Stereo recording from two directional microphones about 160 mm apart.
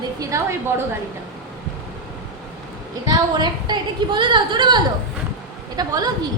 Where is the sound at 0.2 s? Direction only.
20° right (ahead or behind).